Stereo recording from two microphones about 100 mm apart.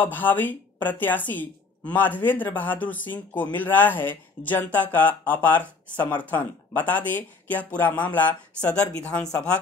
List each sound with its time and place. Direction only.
0.0 s speech: 20° left (ahead or behind)